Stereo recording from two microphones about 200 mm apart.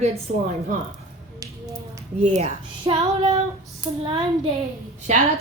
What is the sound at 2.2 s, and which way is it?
A child's voice, 35° right (ahead or behind).